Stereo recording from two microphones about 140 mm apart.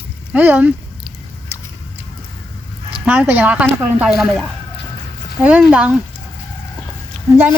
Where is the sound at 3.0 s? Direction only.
10° right (ahead or behind).